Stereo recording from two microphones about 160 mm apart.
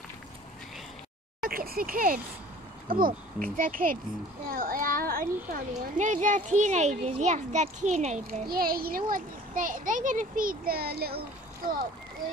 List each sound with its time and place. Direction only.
1.4 s a sound: 65° right (ahead or behind)
2.9 s a child's voice: 60° right (ahead or behind); by 8.4 s 45° right (ahead or behind)
8.5 s a child's voice: 70° right (ahead or behind)